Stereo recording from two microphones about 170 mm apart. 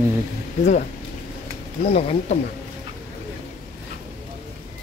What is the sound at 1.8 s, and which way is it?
Speech, 35° left (ahead or behind).